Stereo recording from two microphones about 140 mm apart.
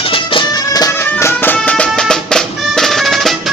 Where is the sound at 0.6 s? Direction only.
25° left (ahead or behind).